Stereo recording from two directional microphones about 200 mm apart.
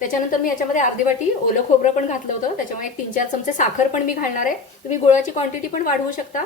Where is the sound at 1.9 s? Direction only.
35° left (ahead or behind).